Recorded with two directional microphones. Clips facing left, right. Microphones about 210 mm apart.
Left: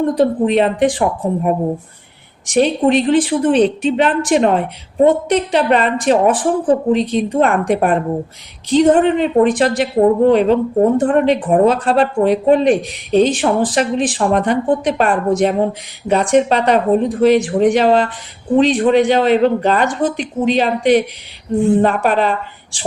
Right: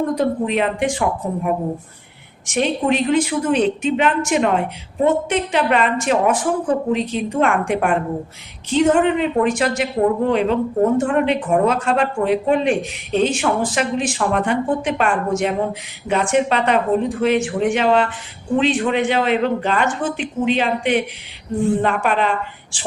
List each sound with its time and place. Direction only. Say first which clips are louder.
0.2 s speech: left 5 dB; 35° left (ahead or behind)
2.5 s speech: left 5 dB; 35° left (ahead or behind)